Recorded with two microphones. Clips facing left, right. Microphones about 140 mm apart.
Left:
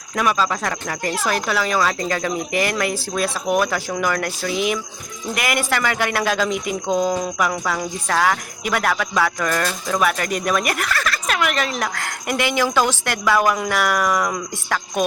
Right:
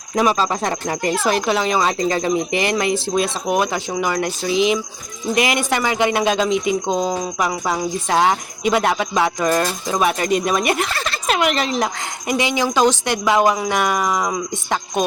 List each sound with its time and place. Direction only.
0.2 s speech: 30° right (ahead or behind)